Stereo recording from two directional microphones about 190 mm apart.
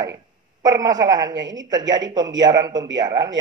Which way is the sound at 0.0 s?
20° right (ahead or behind).